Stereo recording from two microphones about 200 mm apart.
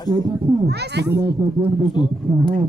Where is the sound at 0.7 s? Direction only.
55° right (ahead or behind).